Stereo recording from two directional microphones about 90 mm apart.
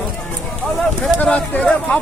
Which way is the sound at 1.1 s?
15° left (ahead or behind).